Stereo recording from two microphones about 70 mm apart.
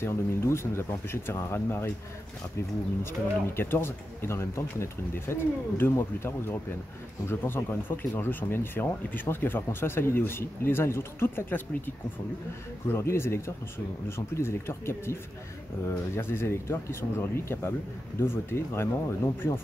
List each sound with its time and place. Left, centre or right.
0.0 s speech: left
3.0 s speech: left
16.2 s speech: left